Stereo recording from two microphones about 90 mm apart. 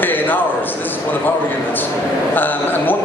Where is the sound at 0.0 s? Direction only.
20° left (ahead or behind).